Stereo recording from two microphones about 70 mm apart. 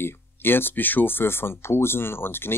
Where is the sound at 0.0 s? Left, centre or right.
Left.